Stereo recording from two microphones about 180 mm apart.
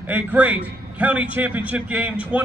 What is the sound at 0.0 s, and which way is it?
A man's voice, 10° right (ahead or behind).